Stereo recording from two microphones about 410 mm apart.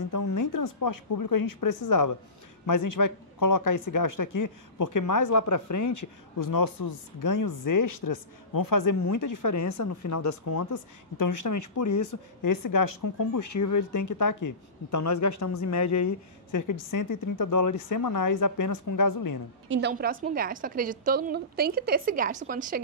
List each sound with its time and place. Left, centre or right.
0.1 s speech: left
19.7 s a woman's voice: right